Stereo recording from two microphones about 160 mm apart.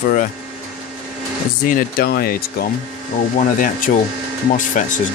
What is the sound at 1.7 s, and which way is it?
Speech, 65° left (ahead or behind).